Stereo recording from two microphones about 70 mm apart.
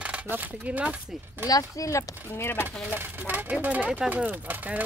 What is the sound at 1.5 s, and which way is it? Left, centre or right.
Speech, left.